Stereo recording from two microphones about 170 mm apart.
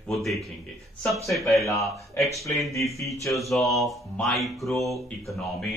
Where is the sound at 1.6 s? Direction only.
15° left (ahead or behind).